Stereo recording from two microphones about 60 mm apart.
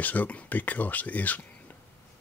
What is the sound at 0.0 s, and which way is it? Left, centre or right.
Speech, left.